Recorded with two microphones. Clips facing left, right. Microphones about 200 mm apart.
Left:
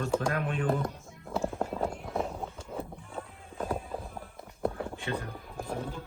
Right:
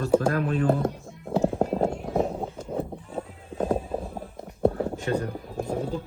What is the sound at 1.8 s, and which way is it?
Run, 25° right (ahead or behind).